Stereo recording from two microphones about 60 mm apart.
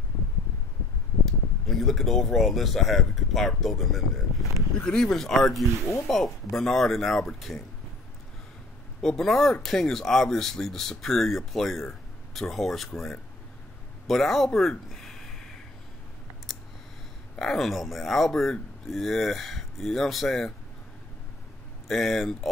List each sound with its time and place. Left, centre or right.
1.2 s speech: centre
4.7 s speech: centre
9.0 s speech: centre
17.4 s speech: centre
21.8 s speech: centre